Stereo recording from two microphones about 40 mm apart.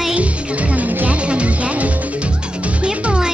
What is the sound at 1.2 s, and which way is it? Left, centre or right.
Music, right.